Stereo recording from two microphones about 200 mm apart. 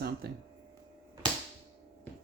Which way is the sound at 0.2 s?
50° right (ahead or behind).